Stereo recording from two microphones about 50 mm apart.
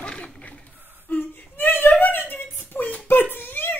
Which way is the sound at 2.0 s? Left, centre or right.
Left.